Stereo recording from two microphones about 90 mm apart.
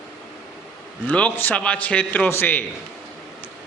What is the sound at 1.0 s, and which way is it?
A man's voice, 15° left (ahead or behind).